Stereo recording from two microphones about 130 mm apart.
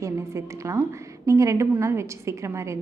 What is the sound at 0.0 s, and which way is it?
A woman's voice, 25° right (ahead or behind).